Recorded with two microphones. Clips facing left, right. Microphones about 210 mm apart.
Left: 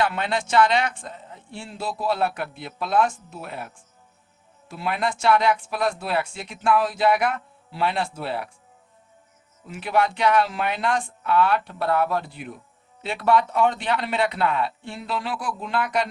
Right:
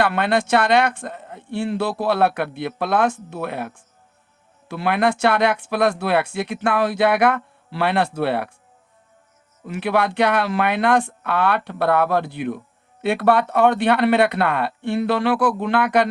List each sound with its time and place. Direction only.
0.0 s speech: 60° right (ahead or behind)
4.7 s speech: 70° right (ahead or behind)
9.6 s speech: 65° right (ahead or behind)